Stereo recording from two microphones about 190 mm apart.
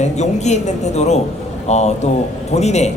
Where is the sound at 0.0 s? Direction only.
35° left (ahead or behind).